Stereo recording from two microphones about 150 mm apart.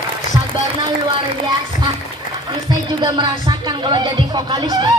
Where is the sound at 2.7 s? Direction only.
30° right (ahead or behind).